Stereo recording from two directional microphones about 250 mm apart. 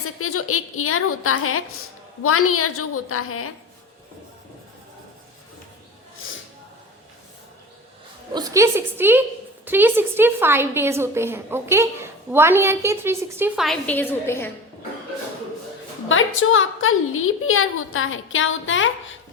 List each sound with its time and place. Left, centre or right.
0.2 s a woman's voice: left
8.3 s a woman's voice: centre
16.0 s a woman's voice: left